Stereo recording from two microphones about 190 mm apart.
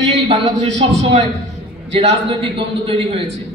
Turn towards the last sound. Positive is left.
turn(degrees=-30)  # may be behind; listen again after turning